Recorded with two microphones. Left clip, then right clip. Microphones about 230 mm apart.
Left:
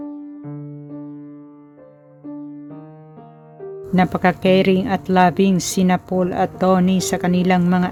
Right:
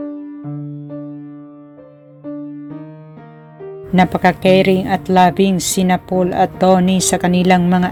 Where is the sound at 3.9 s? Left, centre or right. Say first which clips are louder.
Right 4 dB; centre.